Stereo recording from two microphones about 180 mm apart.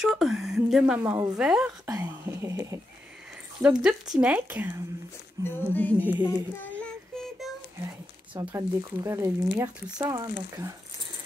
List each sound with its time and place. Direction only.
0.0 s a woman's voice: centre (ahead or behind)
1.4 s a woman's voice: 5° right (ahead or behind)
1.9 s speech: 15° right (ahead or behind)
3.8 s speech: 5° right (ahead or behind)
5.7 s music: 10° left (ahead or behind)
5.9 s speech: 10° right (ahead or behind)
6.2 s child singing: 10° left (ahead or behind)
8.4 s speech: 15° right (ahead or behind)